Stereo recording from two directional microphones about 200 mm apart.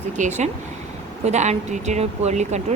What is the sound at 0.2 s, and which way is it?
A woman's voice, 35° right (ahead or behind).